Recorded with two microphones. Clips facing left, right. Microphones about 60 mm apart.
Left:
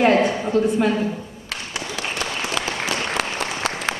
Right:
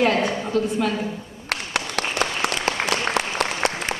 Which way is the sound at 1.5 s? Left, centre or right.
Right.